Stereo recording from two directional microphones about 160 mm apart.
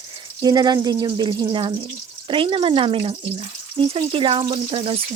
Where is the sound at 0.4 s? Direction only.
25° right (ahead or behind).